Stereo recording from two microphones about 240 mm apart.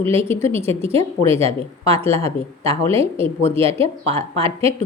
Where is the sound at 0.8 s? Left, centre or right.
Right.